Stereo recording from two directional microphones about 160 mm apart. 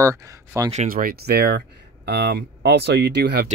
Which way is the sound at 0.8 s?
65° right (ahead or behind).